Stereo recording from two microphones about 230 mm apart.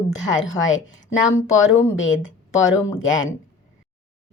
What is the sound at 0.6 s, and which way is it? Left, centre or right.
Speech, left.